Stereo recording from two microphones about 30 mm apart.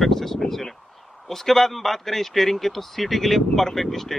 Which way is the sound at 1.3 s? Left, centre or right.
Centre.